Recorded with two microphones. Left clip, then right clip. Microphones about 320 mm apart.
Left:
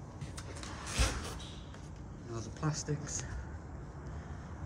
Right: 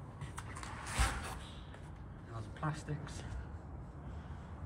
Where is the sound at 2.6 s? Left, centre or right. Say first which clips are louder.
Left 2 dB; centre.